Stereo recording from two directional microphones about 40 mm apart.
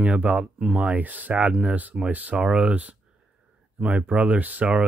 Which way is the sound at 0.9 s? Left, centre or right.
Right.